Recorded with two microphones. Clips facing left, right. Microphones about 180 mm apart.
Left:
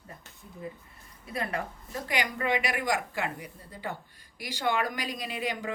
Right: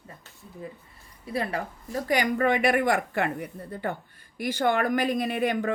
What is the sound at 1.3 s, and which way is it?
Speech, 30° right (ahead or behind).